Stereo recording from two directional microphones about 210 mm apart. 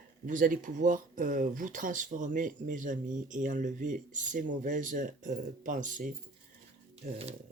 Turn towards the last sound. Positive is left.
turn(degrees=-40)  # may be behind; listen again after turning